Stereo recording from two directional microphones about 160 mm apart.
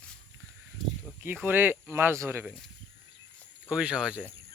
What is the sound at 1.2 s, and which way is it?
Speech, 10° right (ahead or behind).